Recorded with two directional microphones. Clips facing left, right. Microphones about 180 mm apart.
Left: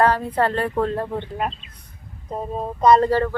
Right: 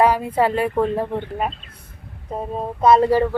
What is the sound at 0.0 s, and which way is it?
Speech, 10° right (ahead or behind).